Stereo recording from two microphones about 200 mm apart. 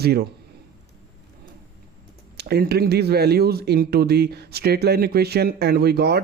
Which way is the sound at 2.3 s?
50° right (ahead or behind).